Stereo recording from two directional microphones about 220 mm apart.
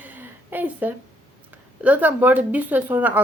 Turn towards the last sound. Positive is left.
turn(degrees=-5)  # may be behind; listen again after turning